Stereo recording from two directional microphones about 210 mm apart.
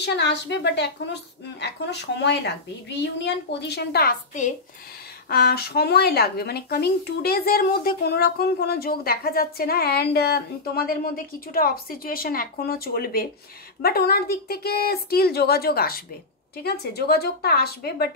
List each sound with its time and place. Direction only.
0.0 s speech: 55° left (ahead or behind); by 4.6 s 40° left (ahead or behind)
5.3 s speech: 50° left (ahead or behind)